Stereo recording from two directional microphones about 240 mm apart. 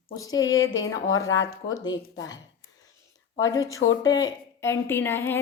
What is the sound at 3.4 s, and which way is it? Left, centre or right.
A woman's voice, centre.